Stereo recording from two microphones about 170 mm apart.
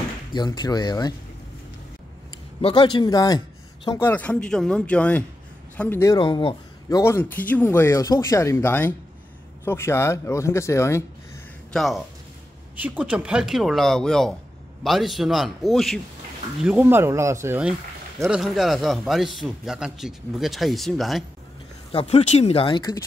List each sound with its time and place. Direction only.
0.3 s speech: 25° left (ahead or behind)
2.6 s speech: 30° left (ahead or behind)
4.1 s speech: 10° left (ahead or behind)
6.1 s speech: 25° left (ahead or behind)
11.7 s a man's voice: centre (ahead or behind)
21.9 s speech: 40° left (ahead or behind)